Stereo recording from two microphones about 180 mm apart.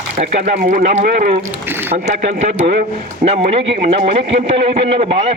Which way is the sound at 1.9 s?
40° right (ahead or behind).